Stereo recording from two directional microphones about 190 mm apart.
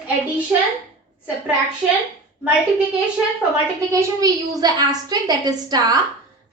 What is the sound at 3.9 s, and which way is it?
A woman's voice, 15° right (ahead or behind).